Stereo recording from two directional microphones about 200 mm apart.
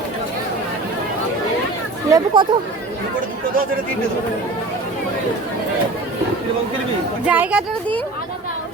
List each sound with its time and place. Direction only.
2.0 s speech: 20° right (ahead or behind)
7.3 s speech: 5° right (ahead or behind)